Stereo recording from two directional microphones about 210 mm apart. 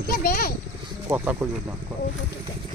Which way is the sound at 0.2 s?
45° left (ahead or behind).